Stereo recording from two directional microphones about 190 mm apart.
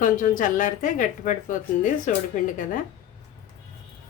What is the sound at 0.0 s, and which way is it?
A woman's voice, 45° left (ahead or behind).